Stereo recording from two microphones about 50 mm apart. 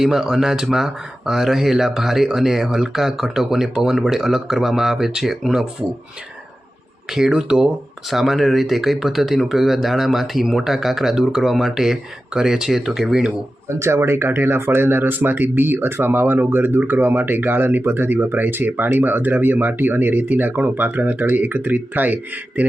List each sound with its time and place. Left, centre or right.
0.0 s speech: centre
7.1 s speech: centre
13.7 s speech: right